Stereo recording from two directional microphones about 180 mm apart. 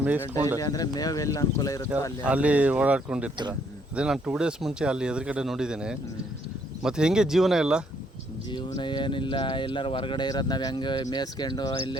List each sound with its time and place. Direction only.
0.0 s speech: 10° right (ahead or behind)
0.6 s speech: 20° left (ahead or behind)
2.2 s speech: 10° right (ahead or behind)
8.4 s speech: 25° left (ahead or behind)